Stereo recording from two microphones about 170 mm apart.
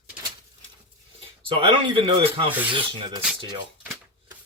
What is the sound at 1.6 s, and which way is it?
Speech, 30° right (ahead or behind).